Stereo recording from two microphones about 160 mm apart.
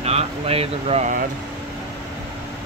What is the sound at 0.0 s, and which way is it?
Speech, 40° right (ahead or behind).